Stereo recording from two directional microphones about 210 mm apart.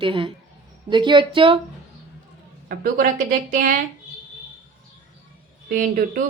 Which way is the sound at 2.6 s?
40° right (ahead or behind).